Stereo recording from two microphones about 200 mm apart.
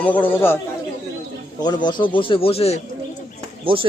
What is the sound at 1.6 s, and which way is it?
Speech, 20° left (ahead or behind).